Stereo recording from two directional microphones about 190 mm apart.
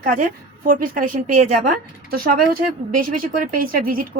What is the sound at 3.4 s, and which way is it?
Speech, 50° right (ahead or behind).